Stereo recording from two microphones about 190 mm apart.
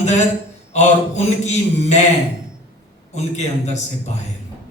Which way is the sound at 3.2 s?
35° left (ahead or behind).